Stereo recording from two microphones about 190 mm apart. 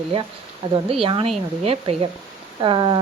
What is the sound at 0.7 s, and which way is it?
Speech, 30° right (ahead or behind).